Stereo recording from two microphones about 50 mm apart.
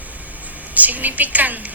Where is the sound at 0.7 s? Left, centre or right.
Right.